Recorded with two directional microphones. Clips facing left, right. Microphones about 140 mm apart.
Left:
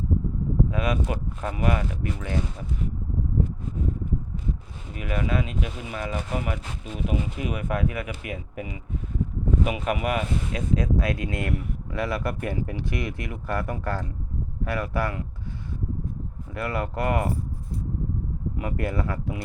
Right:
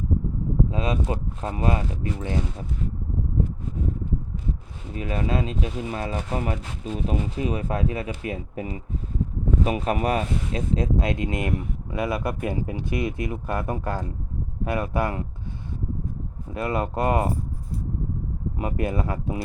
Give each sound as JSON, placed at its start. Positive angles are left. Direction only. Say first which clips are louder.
{"t": 0.7, "sound": "speech", "louder": "right 1 dB", "side_deg": -25}
{"t": 4.9, "sound": "speech", "louder": "right 1 dB", "side_deg": -30}
{"t": 16.5, "sound": "speech", "louder": "right 3 dB", "side_deg": -25}
{"t": 18.5, "sound": "speech", "louder": "right 2 dB", "side_deg": -20}